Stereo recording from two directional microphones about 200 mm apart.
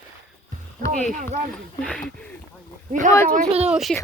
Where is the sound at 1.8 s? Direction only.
5° left (ahead or behind).